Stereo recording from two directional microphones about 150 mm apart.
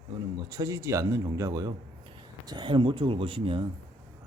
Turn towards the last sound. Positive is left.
turn(degrees=-35)  # may be behind; listen again after turning